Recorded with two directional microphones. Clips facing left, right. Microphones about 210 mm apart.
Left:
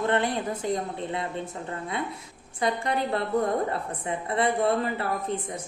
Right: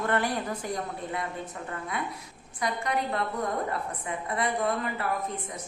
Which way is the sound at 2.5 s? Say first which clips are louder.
Left 3 dB; 30° left (ahead or behind).